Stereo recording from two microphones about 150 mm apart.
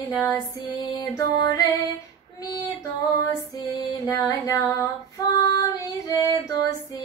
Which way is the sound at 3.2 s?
25° left (ahead or behind).